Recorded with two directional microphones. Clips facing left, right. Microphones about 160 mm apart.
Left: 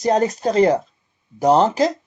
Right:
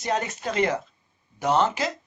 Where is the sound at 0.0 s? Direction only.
35° left (ahead or behind).